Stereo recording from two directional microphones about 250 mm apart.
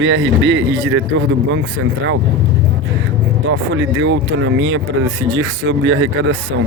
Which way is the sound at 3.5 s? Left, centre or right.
Right.